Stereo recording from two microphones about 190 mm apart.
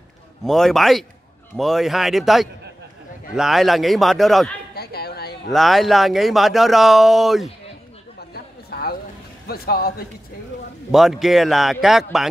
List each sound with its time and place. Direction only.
0.4 s speech: centre (ahead or behind)
4.7 s a sound: 55° left (ahead or behind)
5.5 s speech: centre (ahead or behind)
8.3 s a sound: 55° left (ahead or behind)
9.5 s a man's voice: 55° left (ahead or behind)
10.9 s speech: centre (ahead or behind)